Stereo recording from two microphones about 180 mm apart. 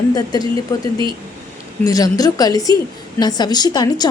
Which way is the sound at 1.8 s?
20° left (ahead or behind).